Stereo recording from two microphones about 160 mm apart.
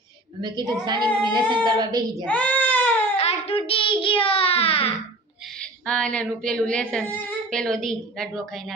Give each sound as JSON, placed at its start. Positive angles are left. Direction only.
{"t": 0.4, "sound": "speech", "side_deg": -25}
{"t": 2.2, "sound": "baby cry", "side_deg": 10}
{"t": 3.2, "sound": "child singing", "side_deg": 40}
{"t": 5.8, "sound": "a woman's voice", "side_deg": 5}